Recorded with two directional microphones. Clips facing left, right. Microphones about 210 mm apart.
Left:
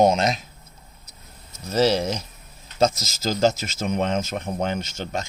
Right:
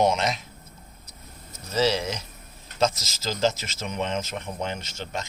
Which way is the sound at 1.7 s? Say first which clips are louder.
Left 4 dB; 45° left (ahead or behind).